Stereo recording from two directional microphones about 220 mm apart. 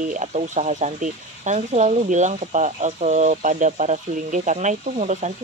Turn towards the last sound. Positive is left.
turn(degrees=-30)  # may be behind; listen again after turning